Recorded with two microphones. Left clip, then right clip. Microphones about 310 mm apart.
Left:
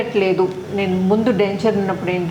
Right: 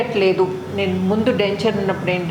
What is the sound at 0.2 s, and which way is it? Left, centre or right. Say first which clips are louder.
A woman's voice: even; left.